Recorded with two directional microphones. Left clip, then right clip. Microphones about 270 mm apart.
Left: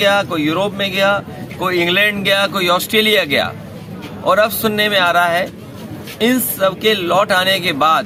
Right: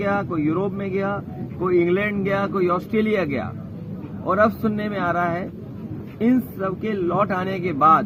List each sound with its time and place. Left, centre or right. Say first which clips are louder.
0.0 s speech: left 8 dB; left